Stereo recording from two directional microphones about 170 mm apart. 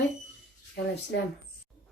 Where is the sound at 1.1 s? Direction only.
90° left.